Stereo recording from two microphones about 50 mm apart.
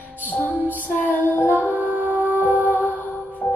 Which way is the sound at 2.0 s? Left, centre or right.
Left.